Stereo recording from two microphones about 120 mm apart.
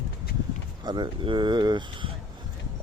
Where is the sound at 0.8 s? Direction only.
40° right (ahead or behind).